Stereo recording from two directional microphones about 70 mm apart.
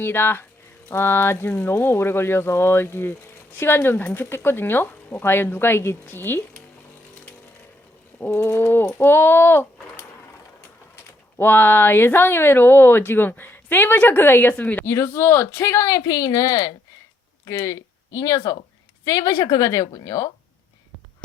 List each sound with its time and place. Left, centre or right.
0.0 s speech: left
8.5 s speech: left
11.3 s speech: left
14.8 s speech: left
15.8 s a woman's voice: left